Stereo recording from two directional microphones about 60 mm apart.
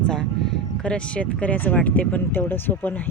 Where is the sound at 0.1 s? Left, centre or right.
Centre.